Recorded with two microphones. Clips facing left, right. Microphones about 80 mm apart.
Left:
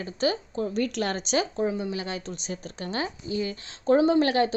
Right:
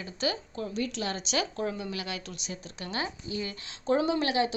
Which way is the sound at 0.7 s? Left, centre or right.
Left.